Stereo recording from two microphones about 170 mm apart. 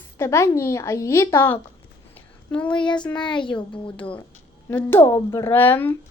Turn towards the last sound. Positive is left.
turn(degrees=10)  # may be behind; listen again after turning